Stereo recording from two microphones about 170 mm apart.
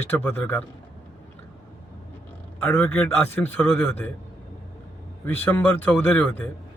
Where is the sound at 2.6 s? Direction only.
5° left (ahead or behind).